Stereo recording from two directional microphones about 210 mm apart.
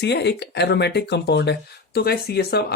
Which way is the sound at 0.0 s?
55° left (ahead or behind).